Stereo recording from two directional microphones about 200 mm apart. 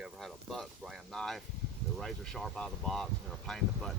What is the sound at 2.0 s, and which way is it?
Speech, 5° left (ahead or behind).